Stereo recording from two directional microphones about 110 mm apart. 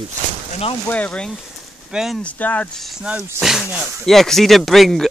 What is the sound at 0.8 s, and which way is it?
Speech, 15° left (ahead or behind).